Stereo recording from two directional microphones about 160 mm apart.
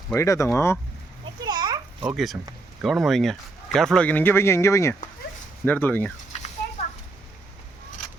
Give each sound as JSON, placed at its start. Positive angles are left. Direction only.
{"t": 0.1, "sound": "speech", "side_deg": 20}
{"t": 1.5, "sound": "a sound", "side_deg": -25}
{"t": 2.0, "sound": "speech", "side_deg": 0}